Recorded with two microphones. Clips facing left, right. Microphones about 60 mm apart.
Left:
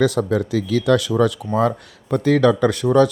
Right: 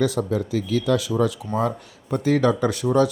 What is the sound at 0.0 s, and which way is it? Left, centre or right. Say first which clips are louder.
Speech: left 4 dB; left.